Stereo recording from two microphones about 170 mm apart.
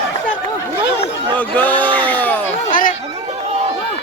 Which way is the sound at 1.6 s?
10° left (ahead or behind).